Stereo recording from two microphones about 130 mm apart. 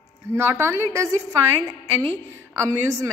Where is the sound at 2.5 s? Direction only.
20° right (ahead or behind).